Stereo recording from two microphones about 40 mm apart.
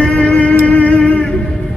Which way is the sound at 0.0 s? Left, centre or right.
Left.